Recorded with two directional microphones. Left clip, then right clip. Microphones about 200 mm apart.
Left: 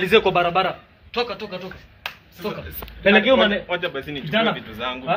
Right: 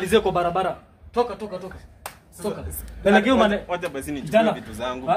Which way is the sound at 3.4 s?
15° right (ahead or behind).